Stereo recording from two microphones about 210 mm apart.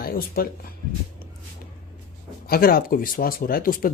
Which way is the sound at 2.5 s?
45° left (ahead or behind).